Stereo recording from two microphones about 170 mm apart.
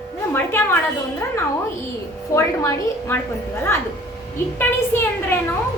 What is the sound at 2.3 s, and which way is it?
Speech, 15° left (ahead or behind).